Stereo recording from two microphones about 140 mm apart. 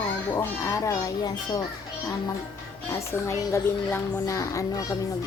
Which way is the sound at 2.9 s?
20° left (ahead or behind).